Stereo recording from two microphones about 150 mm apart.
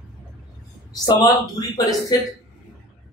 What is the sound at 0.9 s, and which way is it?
Speech, 25° left (ahead or behind).